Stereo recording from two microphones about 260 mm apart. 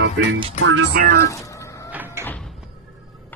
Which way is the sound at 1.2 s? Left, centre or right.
Centre.